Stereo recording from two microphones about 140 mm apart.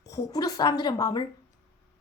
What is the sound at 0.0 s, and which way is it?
A woman's voice, 25° left (ahead or behind).